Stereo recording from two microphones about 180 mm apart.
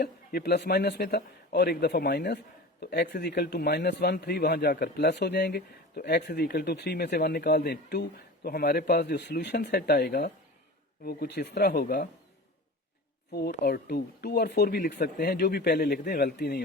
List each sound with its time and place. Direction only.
0.0 s speech: 60° left (ahead or behind)
13.7 s speech: 60° left (ahead or behind)